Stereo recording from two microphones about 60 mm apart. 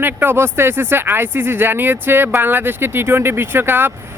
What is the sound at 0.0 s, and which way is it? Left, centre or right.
Speech, right.